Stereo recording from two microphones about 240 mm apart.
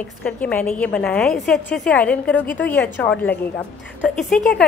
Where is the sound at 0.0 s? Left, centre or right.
Centre.